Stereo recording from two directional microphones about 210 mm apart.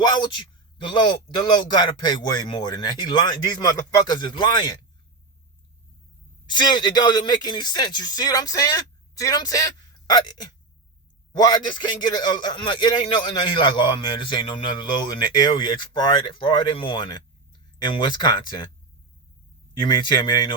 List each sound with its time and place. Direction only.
0.0 s a man's voice: 20° left (ahead or behind)
6.4 s a man's voice: 20° left (ahead or behind)
19.8 s a man's voice: 20° left (ahead or behind)